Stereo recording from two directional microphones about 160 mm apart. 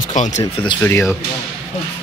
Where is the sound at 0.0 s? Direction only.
50° left (ahead or behind).